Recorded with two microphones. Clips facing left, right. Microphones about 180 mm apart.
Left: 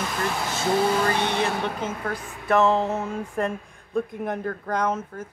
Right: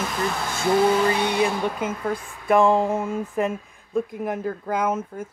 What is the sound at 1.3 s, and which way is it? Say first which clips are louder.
Speech: right 3 dB; 10° right (ahead or behind).